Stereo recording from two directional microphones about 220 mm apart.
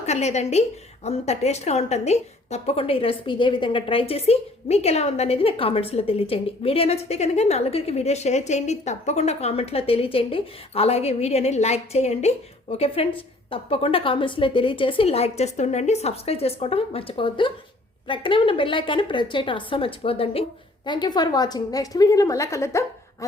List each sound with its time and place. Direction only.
0.0 s a woman's voice: 30° left (ahead or behind); by 22.8 s 15° left (ahead or behind)